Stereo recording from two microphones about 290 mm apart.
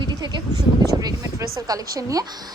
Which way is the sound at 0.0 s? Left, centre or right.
Centre.